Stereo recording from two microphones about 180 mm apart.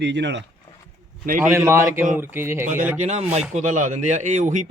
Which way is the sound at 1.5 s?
15° right (ahead or behind).